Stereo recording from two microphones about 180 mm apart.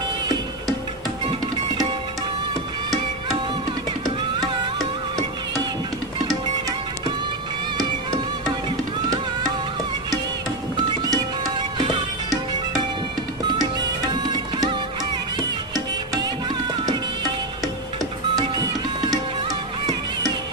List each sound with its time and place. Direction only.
1.3 s music: 25° right (ahead or behind)
4.0 s music: 20° right (ahead or behind)
11.0 s music: 20° right (ahead or behind)
18.3 s printer: 25° right (ahead or behind)